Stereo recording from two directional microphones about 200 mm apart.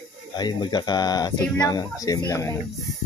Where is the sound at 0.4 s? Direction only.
20° left (ahead or behind).